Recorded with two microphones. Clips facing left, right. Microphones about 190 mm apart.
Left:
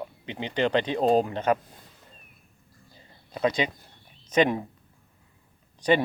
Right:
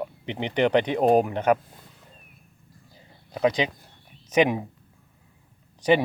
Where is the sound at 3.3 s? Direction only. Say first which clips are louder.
Right 2 dB; 15° right (ahead or behind).